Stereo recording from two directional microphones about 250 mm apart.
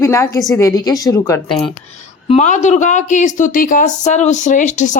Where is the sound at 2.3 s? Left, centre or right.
Left.